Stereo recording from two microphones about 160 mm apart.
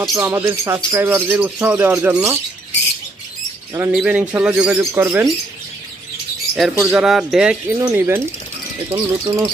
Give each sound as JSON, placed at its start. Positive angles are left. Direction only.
{"t": 0.1, "sound": "speech", "side_deg": -15}
{"t": 3.9, "sound": "speech", "side_deg": -10}
{"t": 6.6, "sound": "speech", "side_deg": -5}